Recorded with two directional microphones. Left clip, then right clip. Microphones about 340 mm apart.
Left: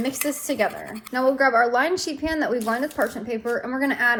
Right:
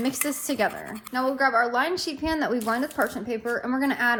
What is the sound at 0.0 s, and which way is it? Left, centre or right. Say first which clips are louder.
A woman's voice: left 2 dB; centre.